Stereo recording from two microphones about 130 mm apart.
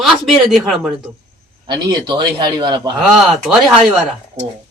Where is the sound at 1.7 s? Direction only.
35° right (ahead or behind).